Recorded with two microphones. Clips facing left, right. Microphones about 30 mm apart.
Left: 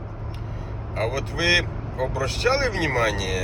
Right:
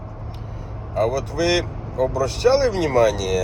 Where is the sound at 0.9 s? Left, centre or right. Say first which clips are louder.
Right 5 dB; left.